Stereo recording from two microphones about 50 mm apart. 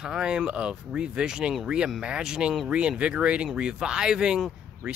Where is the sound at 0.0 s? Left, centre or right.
Centre.